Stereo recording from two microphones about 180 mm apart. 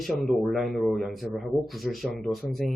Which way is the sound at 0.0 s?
Centre (ahead or behind).